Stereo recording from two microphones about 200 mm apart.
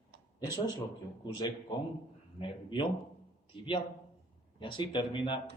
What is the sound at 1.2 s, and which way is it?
Speech, 20° left (ahead or behind).